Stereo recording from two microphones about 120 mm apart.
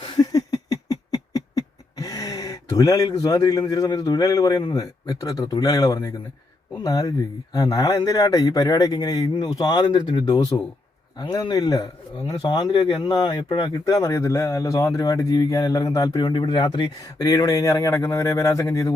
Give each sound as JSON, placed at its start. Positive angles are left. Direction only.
{"t": 0.2, "sound": "a sound", "side_deg": 30}
{"t": 4.7, "sound": "speech", "side_deg": 30}
{"t": 13.9, "sound": "speech", "side_deg": 25}